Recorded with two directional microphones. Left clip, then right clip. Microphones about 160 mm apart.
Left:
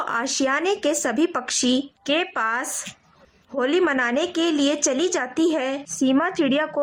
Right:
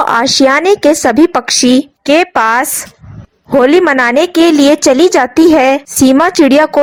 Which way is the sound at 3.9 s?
45° right (ahead or behind).